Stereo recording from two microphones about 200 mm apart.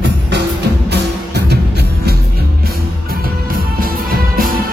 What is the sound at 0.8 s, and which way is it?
Music, 55° right (ahead or behind).